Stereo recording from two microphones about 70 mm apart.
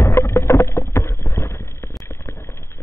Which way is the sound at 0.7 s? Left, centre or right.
Left.